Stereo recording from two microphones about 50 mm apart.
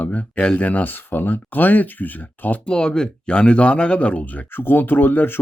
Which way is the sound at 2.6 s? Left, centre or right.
Centre.